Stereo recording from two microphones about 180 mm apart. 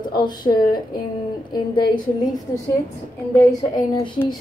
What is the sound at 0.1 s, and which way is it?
A woman's voice, 25° left (ahead or behind).